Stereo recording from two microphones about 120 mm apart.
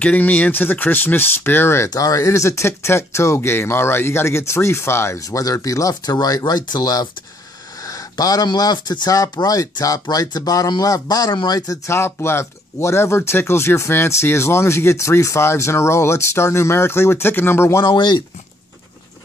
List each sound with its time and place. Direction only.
0.0 s speech: 15° left (ahead or behind)
17.8 s speech: 40° left (ahead or behind)